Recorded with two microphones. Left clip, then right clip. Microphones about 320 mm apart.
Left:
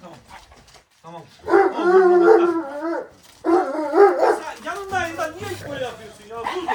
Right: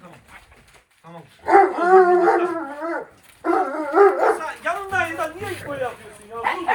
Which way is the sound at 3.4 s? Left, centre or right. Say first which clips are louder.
Left 2 dB; right.